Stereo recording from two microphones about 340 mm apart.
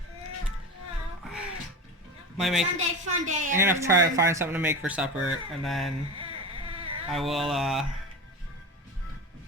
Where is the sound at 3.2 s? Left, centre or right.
Right.